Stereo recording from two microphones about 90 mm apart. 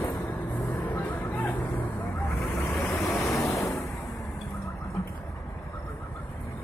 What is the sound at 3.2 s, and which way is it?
Vehicle, 35° left (ahead or behind).